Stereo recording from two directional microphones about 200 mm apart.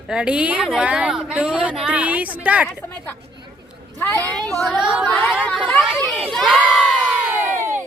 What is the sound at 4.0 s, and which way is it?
Speech, 10° left (ahead or behind).